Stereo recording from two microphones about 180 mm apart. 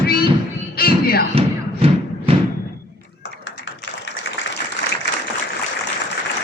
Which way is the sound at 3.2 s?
90° left.